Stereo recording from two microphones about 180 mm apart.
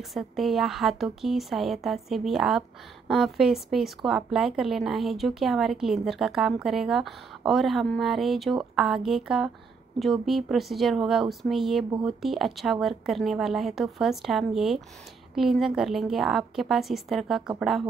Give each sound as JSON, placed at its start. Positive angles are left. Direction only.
{"t": 0.1, "sound": "speech", "side_deg": 0}